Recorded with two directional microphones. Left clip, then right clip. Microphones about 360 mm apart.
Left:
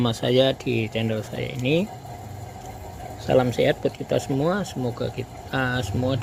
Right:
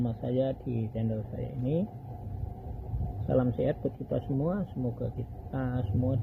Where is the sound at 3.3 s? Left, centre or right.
Centre.